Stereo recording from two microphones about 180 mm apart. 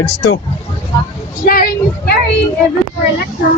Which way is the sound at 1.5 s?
55° left (ahead or behind).